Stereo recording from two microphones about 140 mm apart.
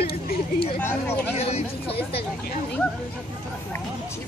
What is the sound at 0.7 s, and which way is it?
Speech, 15° left (ahead or behind).